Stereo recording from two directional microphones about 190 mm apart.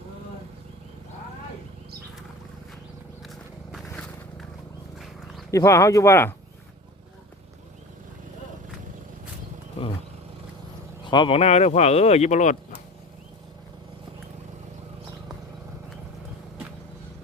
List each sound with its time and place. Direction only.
3.2 s a sound: centre (ahead or behind)
5.5 s speech: 15° left (ahead or behind)
11.1 s speech: 25° left (ahead or behind)